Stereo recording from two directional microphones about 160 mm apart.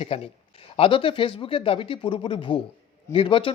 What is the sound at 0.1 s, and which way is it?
Speech, 35° left (ahead or behind).